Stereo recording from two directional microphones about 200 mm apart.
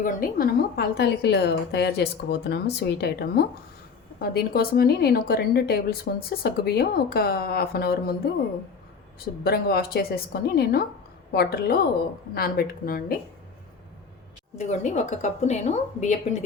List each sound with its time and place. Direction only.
0.0 s a woman's voice: 45° left (ahead or behind)
14.6 s a woman's voice: 35° left (ahead or behind)